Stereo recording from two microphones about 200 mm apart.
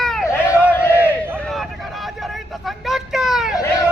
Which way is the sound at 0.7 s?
10° left (ahead or behind).